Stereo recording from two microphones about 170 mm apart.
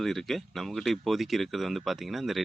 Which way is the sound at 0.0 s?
Centre (ahead or behind).